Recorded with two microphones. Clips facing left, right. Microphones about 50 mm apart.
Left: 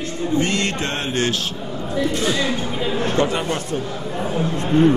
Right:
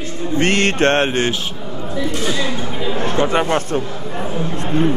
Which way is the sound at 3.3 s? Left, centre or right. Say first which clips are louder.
Right 6 dB; right.